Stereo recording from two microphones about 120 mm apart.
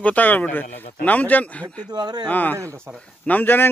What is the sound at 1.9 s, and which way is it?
Speech, 35° right (ahead or behind).